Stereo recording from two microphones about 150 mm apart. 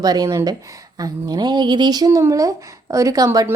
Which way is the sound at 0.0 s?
25° right (ahead or behind).